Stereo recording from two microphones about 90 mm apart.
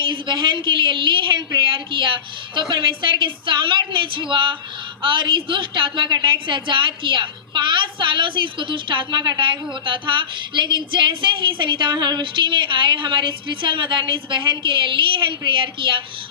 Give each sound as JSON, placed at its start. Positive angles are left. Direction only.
{"t": 0.0, "sound": "a woman's voice", "side_deg": -65}